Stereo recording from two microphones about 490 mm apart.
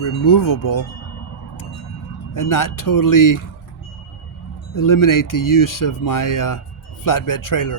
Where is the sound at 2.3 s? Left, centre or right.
Left.